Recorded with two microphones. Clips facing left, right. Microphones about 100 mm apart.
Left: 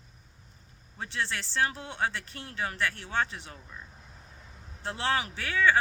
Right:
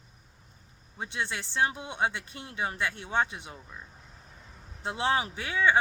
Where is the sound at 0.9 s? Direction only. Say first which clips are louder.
Even; 15° right (ahead or behind).